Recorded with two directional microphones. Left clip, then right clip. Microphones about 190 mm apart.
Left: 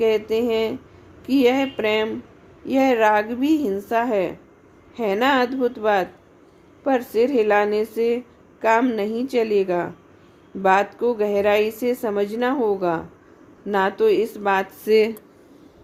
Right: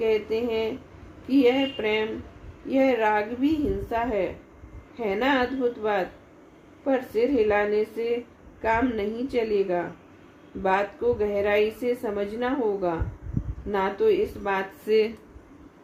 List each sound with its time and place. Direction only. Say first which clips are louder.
0.0 s a woman's voice: left 5 dB; 55° left (ahead or behind)